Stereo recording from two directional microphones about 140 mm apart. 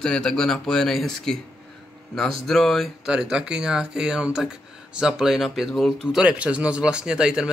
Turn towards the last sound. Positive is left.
turn(degrees=-5)  # may be behind; listen again after turning